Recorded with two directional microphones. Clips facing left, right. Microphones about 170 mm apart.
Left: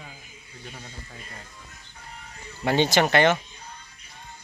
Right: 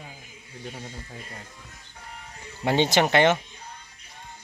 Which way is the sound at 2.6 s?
20° right (ahead or behind).